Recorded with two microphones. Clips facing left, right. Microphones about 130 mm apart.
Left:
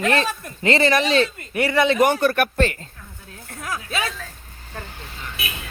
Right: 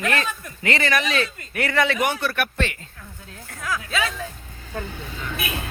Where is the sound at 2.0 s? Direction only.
45° left (ahead or behind).